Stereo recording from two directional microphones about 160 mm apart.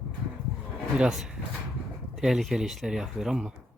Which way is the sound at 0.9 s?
5° right (ahead or behind).